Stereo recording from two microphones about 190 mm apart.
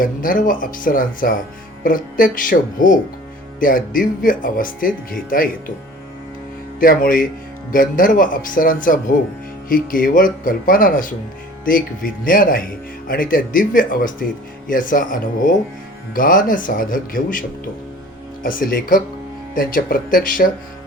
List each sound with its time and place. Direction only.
0.0 s speech: 45° left (ahead or behind)
6.7 s speech: 45° left (ahead or behind)
18.4 s speech: 45° left (ahead or behind)